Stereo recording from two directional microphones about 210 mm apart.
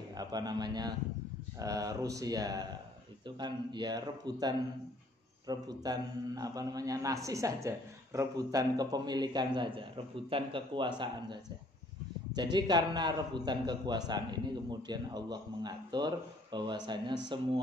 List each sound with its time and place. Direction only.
0.2 s a man's voice: 20° right (ahead or behind)
12.5 s a man's voice: 20° right (ahead or behind)